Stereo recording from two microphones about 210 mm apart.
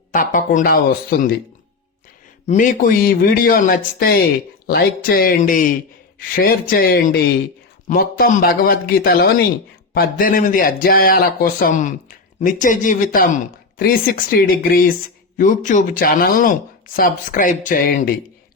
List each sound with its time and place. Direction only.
0.1 s speech: 40° left (ahead or behind)
2.5 s speech: 40° left (ahead or behind)